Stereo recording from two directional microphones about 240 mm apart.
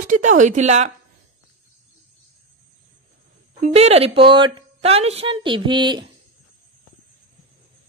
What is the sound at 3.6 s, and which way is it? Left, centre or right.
Speech, right.